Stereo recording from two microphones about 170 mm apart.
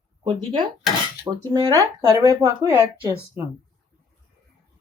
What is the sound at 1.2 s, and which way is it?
Speech, 20° right (ahead or behind).